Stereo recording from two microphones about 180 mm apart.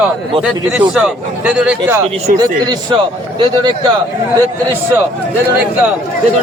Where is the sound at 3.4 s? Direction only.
25° right (ahead or behind).